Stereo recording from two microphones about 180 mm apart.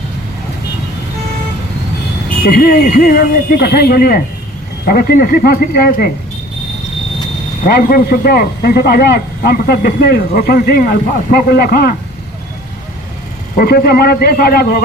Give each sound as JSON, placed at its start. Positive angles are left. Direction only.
{"t": 2.4, "sound": "speech", "side_deg": 60}
{"t": 7.6, "sound": "speech", "side_deg": 55}
{"t": 13.6, "sound": "speech", "side_deg": 60}